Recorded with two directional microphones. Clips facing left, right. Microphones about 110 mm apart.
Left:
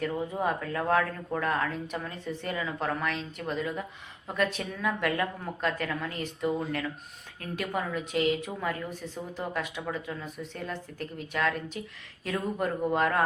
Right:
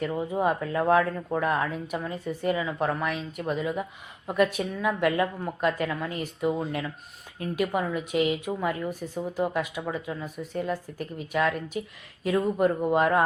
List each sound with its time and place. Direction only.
0.0 s a woman's voice: 10° right (ahead or behind)